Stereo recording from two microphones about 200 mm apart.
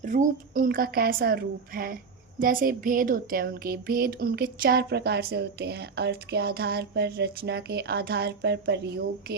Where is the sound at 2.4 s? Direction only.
45° right (ahead or behind).